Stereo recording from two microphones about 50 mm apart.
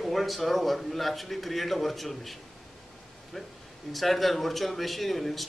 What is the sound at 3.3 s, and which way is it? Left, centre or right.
A man's voice, centre.